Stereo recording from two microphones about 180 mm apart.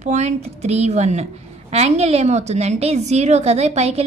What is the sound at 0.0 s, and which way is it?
A woman's voice, 40° right (ahead or behind).